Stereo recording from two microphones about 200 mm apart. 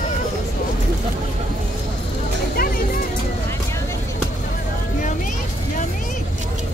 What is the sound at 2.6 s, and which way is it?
Vehicle, 45° left (ahead or behind).